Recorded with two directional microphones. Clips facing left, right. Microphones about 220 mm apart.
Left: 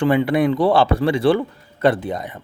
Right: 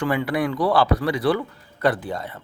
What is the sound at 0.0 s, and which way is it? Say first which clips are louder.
A man's voice: left 6 dB; 25° left (ahead or behind).